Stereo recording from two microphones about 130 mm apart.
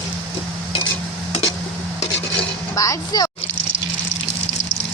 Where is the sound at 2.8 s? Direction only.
25° left (ahead or behind).